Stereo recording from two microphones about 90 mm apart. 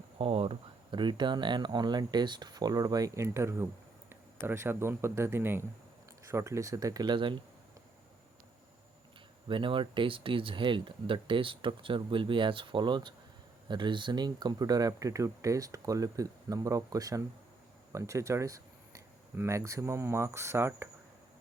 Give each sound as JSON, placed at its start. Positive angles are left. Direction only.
{"t": 0.2, "sound": "speech", "side_deg": -90}
{"t": 3.3, "sound": "speech", "side_deg": -30}
{"t": 9.5, "sound": "speech", "side_deg": -70}